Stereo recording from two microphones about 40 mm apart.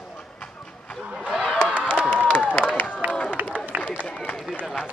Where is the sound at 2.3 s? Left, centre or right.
Left.